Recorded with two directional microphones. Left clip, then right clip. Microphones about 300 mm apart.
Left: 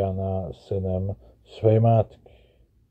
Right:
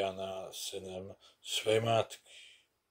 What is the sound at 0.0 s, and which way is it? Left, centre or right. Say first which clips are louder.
Speech: left 9 dB; right.